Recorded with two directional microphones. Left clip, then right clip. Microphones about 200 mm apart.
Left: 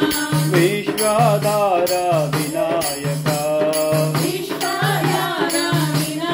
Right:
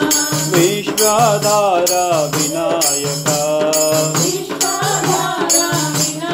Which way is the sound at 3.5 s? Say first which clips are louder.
Right 2 dB; 30° right (ahead or behind).